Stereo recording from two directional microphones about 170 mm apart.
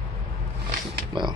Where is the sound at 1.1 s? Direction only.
25° right (ahead or behind).